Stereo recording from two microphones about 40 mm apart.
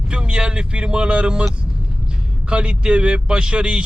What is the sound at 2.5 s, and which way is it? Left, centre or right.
Speech, right.